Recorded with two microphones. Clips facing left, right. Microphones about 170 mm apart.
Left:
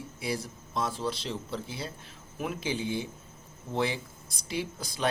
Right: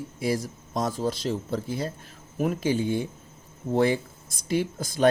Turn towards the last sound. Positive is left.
turn(degrees=-50)  # may be behind; listen again after turning